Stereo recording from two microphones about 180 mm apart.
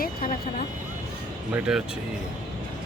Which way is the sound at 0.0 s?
55° left (ahead or behind).